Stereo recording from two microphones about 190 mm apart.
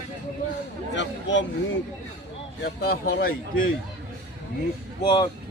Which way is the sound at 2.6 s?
55° left (ahead or behind).